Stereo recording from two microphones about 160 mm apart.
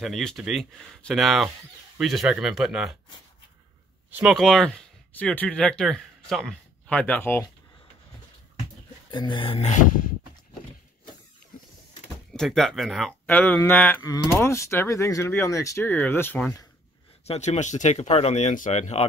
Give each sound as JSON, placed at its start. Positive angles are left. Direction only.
{"t": 0.0, "sound": "speech", "side_deg": 0}
{"t": 4.1, "sound": "speech", "side_deg": -5}
{"t": 9.1, "sound": "speech", "side_deg": 30}
{"t": 12.3, "sound": "speech", "side_deg": 0}
{"t": 13.3, "sound": "speech", "side_deg": 10}
{"t": 17.3, "sound": "speech", "side_deg": 45}